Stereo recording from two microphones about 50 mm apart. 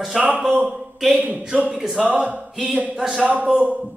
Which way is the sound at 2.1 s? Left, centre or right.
Right.